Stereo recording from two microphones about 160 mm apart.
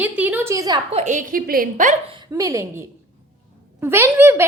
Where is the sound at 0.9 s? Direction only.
45° right (ahead or behind).